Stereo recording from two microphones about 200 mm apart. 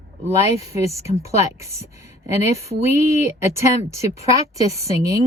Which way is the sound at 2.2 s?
30° left (ahead or behind).